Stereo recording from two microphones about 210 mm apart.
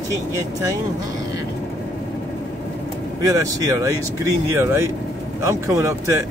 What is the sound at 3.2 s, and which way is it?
Speech, 15° right (ahead or behind).